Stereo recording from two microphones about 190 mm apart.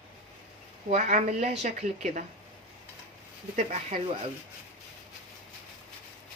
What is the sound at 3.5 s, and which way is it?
Speech, 40° right (ahead or behind).